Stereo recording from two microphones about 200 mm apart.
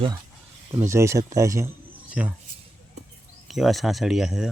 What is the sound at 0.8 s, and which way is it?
Speech, 15° right (ahead or behind).